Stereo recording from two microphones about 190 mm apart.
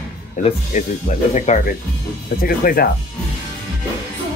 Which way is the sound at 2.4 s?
50° left (ahead or behind).